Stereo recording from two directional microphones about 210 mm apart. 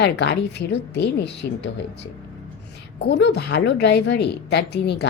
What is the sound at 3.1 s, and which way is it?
A woman's voice, 55° left (ahead or behind).